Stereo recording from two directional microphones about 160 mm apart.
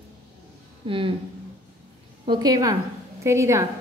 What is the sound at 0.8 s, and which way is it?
Speech, 35° right (ahead or behind).